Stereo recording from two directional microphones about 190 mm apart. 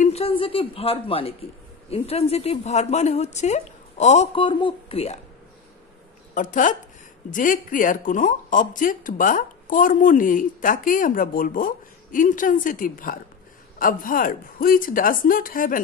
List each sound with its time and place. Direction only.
0.0 s a woman's voice: 30° left (ahead or behind)
6.3 s speech: 45° left (ahead or behind)